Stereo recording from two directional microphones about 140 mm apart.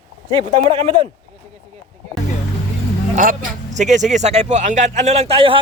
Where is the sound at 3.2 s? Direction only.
80° right; by 5.6 s 40° right (ahead or behind).